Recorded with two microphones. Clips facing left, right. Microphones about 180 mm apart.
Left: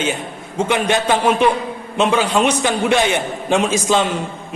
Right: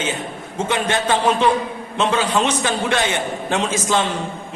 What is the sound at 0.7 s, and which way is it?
A man's voice, 15° left (ahead or behind).